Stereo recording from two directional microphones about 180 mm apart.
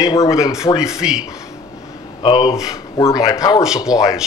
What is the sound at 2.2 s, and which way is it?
A man's voice, 25° left (ahead or behind).